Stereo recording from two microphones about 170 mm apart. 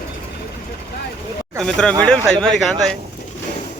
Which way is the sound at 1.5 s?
5° left (ahead or behind).